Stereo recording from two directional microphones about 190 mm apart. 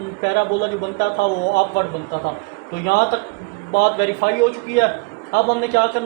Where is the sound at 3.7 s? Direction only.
60° left (ahead or behind).